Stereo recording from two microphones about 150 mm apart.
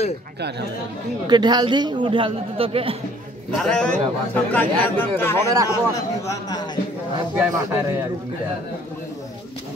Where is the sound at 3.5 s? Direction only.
5° left (ahead or behind).